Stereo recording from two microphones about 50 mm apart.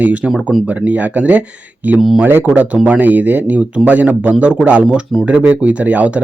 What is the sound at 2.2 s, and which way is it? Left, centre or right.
Speech, right.